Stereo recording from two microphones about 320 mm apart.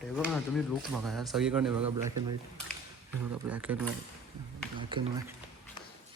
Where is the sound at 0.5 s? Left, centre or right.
Centre.